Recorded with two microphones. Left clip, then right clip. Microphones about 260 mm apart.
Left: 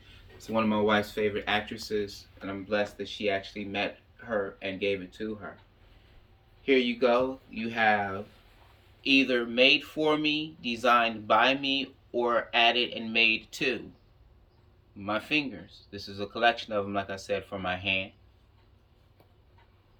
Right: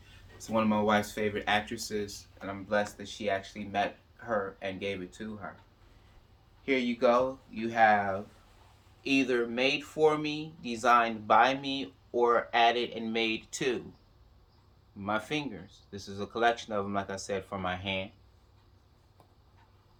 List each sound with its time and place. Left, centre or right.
0.3 s speech: right
6.7 s speech: right
15.0 s speech: right